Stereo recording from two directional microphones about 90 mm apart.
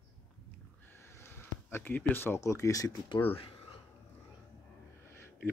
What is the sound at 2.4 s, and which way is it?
Speech, 35° left (ahead or behind).